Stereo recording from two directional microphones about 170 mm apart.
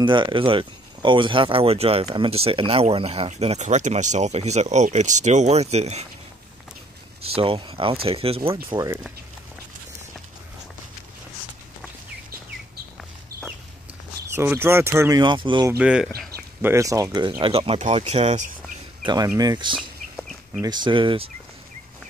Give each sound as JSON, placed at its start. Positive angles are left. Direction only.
{"t": 0.0, "sound": "speech", "side_deg": -30}
{"t": 7.3, "sound": "speech", "side_deg": -35}
{"t": 8.6, "sound": "speech", "side_deg": -20}
{"t": 14.2, "sound": "speech", "side_deg": -15}
{"t": 15.8, "sound": "speech", "side_deg": -5}
{"t": 16.6, "sound": "speech", "side_deg": -20}
{"t": 19.0, "sound": "speech", "side_deg": -20}
{"t": 20.2, "sound": "a sound", "side_deg": 0}
{"t": 20.6, "sound": "speech", "side_deg": -25}